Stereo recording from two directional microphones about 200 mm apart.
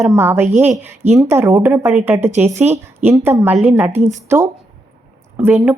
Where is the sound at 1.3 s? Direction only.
10° right (ahead or behind).